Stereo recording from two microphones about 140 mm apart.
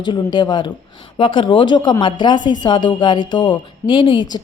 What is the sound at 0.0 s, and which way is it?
A woman's voice, 35° left (ahead or behind).